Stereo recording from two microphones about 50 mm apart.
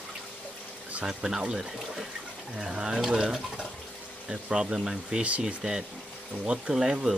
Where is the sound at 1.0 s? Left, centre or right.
Centre.